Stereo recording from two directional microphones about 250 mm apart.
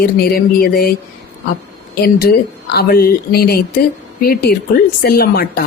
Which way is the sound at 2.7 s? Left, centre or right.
Left.